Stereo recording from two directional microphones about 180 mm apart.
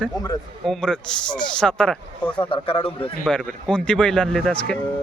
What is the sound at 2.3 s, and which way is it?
Speech, 30° left (ahead or behind).